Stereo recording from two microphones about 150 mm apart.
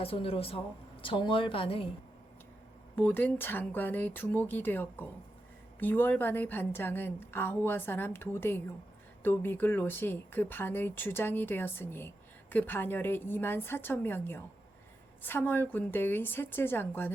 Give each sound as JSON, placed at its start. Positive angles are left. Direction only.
{"t": 0.0, "sound": "speech", "side_deg": 40}
{"t": 2.9, "sound": "speech", "side_deg": 10}